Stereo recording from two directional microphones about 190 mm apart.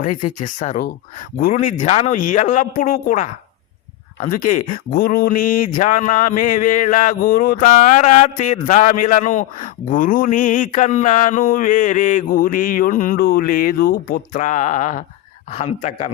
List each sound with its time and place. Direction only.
0.0 s a man's voice: 45° left (ahead or behind)